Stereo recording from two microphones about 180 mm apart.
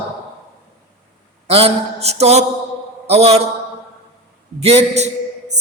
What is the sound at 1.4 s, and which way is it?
A man's voice, 35° right (ahead or behind).